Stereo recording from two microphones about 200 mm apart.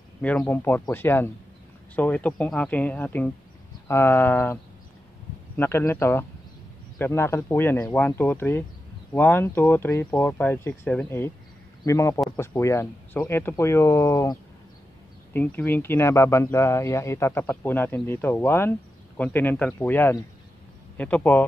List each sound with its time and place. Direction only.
0.2 s speech: 5° left (ahead or behind)
5.6 s speech: 10° left (ahead or behind)